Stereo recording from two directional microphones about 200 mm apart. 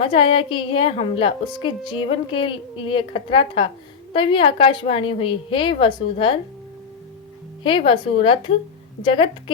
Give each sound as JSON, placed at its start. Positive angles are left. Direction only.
{"t": 0.0, "sound": "a woman's voice", "side_deg": 25}
{"t": 7.6, "sound": "a woman's voice", "side_deg": 25}